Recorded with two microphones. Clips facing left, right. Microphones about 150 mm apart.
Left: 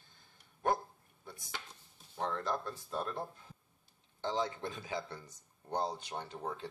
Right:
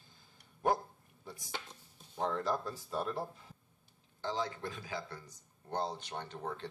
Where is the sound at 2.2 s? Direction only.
10° right (ahead or behind).